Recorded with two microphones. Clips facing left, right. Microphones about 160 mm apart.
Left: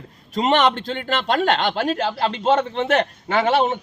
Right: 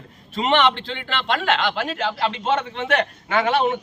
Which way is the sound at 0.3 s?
40° left (ahead or behind).